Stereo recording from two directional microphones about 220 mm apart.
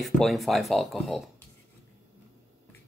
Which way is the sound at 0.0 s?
Centre (ahead or behind).